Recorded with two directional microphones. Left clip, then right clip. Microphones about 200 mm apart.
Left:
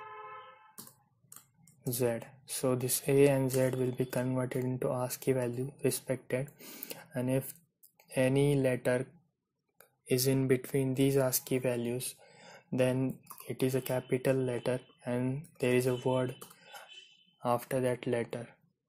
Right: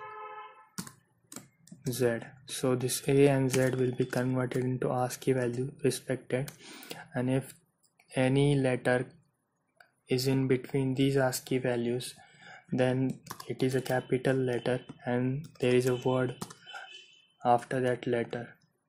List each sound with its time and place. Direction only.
1.9 s speech: 20° left (ahead or behind)